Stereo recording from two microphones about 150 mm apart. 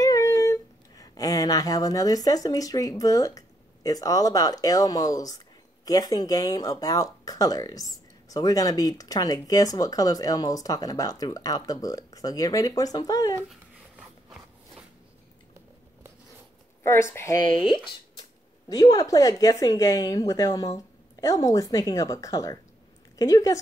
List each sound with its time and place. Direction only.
0.0 s speech: 20° left (ahead or behind)
13.5 s a sound: centre (ahead or behind)
16.8 s speech: 15° left (ahead or behind)
18.7 s speech: 25° left (ahead or behind)